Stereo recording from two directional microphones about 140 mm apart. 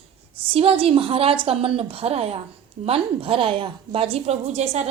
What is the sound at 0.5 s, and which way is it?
A woman's voice, 40° right (ahead or behind).